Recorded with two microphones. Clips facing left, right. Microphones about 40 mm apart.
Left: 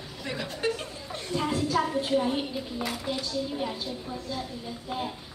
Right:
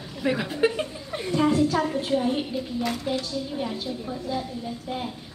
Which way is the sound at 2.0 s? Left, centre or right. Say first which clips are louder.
Right 2 dB; centre.